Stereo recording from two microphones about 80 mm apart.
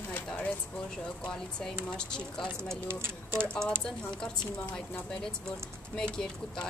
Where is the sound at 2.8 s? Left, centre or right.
Right.